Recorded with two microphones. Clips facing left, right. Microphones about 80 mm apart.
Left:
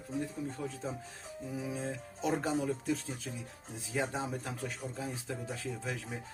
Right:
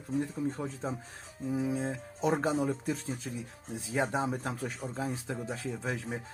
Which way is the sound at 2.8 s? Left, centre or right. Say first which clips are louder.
Right 1 dB; right.